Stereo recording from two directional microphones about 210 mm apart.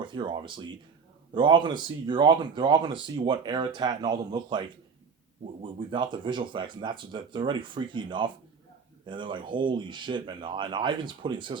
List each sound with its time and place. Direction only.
0.0 s speech: 20° right (ahead or behind)
5.9 s speech: 20° right (ahead or behind)